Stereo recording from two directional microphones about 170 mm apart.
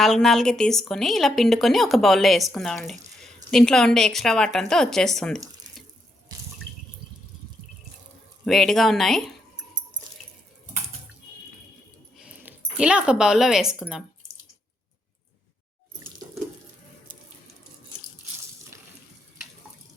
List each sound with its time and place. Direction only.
0.0 s a woman's voice: centre (ahead or behind)
6.3 s water: 25° right (ahead or behind)
8.4 s a woman's voice: centre (ahead or behind)
12.1 s speech: 5° right (ahead or behind)